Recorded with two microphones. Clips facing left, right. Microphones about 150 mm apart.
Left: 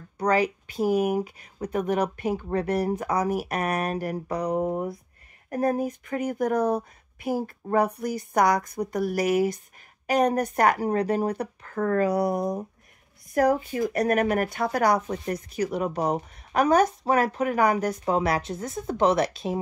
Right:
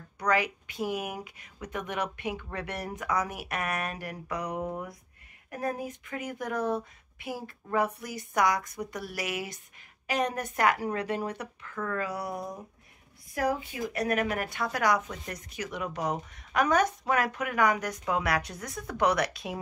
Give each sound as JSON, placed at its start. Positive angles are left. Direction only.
{"t": 0.2, "sound": "speech", "side_deg": 35}